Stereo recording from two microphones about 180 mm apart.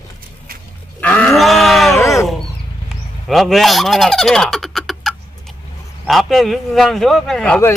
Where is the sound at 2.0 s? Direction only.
15° left (ahead or behind).